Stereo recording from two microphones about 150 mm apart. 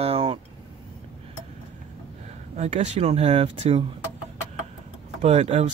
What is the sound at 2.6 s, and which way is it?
Speech, 50° right (ahead or behind).